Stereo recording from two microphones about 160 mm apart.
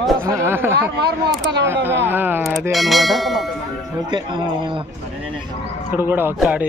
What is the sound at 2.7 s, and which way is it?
Speech, centre (ahead or behind).